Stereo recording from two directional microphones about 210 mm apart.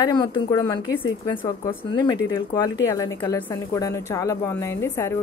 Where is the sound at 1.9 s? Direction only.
20° left (ahead or behind).